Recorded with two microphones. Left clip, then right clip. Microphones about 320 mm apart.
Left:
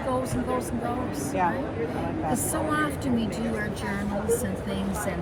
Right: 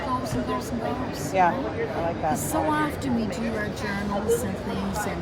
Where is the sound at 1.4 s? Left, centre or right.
Right.